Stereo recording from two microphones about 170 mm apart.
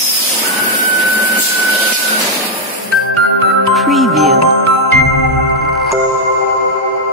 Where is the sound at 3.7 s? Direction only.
Centre (ahead or behind).